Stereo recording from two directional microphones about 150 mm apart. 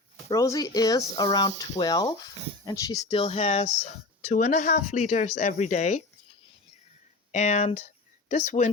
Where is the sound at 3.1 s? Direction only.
40° left (ahead or behind).